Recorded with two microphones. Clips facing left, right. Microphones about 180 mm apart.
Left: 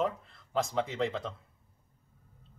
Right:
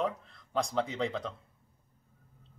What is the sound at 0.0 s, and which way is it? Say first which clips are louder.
Speech: left 1 dB; centre (ahead or behind).